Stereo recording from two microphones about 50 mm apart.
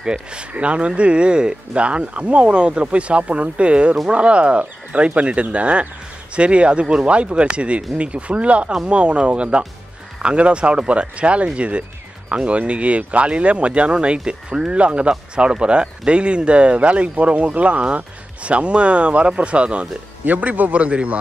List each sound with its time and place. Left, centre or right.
0.0 s speech: centre